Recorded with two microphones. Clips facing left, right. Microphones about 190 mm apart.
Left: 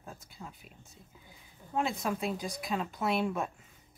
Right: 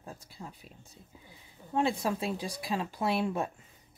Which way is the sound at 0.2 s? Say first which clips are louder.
Right 2 dB; 30° right (ahead or behind).